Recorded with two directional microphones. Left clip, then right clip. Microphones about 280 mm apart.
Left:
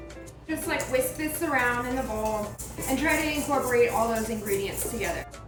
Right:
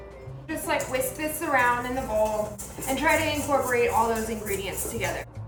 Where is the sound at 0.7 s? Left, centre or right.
Centre.